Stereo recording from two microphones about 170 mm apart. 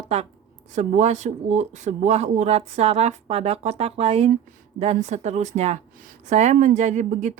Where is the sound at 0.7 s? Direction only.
40° right (ahead or behind).